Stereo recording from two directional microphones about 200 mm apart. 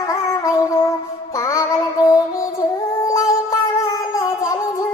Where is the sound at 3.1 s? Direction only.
15° left (ahead or behind).